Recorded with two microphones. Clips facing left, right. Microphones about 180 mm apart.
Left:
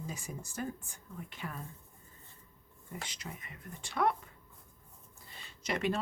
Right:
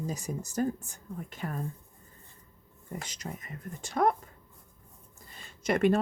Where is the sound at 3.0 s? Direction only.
40° right (ahead or behind).